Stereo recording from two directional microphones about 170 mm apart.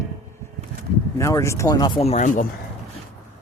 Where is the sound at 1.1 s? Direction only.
15° left (ahead or behind); by 2.4 s 45° left (ahead or behind).